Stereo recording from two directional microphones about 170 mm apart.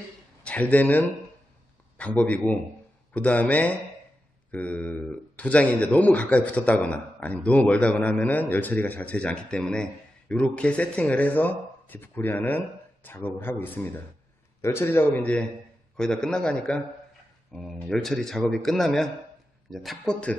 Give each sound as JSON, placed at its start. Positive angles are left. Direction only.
{"t": 0.5, "sound": "a man's voice", "side_deg": 10}